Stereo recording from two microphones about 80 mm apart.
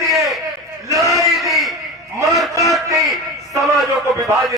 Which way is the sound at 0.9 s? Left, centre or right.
Right.